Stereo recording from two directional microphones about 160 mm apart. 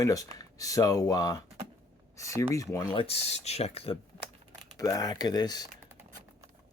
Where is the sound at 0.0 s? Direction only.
20° left (ahead or behind).